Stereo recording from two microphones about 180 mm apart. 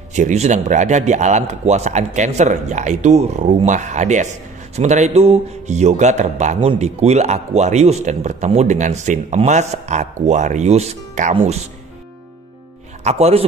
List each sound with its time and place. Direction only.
0.1 s a man's voice: 40° right (ahead or behind)
13.0 s a man's voice: 35° right (ahead or behind)